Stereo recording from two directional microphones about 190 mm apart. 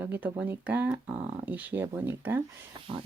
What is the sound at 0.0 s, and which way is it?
Speech, 10° right (ahead or behind).